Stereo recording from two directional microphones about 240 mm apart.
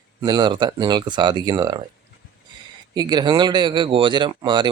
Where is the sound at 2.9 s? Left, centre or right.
Centre.